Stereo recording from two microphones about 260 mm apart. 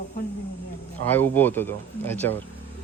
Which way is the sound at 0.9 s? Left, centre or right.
Centre.